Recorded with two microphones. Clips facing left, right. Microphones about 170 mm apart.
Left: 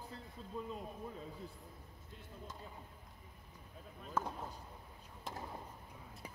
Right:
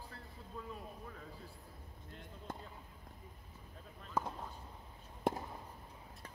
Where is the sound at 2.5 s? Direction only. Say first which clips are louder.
Right 10 dB; 60° right (ahead or behind).